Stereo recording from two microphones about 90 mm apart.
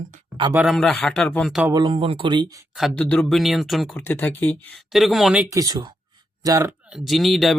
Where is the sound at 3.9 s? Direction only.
20° left (ahead or behind).